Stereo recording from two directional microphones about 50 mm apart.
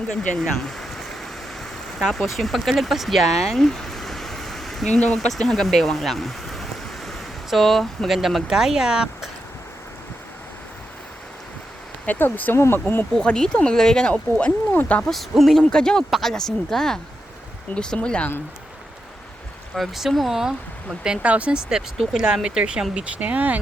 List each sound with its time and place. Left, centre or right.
0.2 s a sound: centre
2.0 s speech: centre
12.0 s speech: left
12.5 s speech: left
13.1 s speech: centre
14.1 s speech: left
15.1 s speech: centre
15.6 s speech: centre
16.0 s speech: centre
19.7 s speech: centre
21.2 s speech: right
21.9 s speech: centre; by 23.6 s right